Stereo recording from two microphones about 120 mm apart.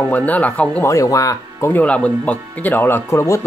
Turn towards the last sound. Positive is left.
turn(degrees=25)  # may be behind; listen again after turning